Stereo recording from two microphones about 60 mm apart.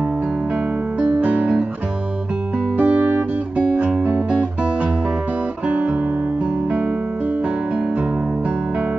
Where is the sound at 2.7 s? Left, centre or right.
Right.